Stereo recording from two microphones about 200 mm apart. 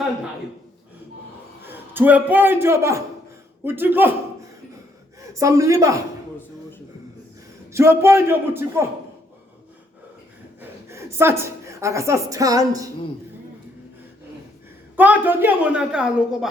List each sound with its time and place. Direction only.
1.6 s a man's voice: 10° right (ahead or behind)
5.3 s a woman's voice: 15° right (ahead or behind)
7.7 s a woman's voice: 10° right (ahead or behind)
10.6 s a woman's voice: 15° right (ahead or behind)
14.9 s a woman's voice: 10° right (ahead or behind)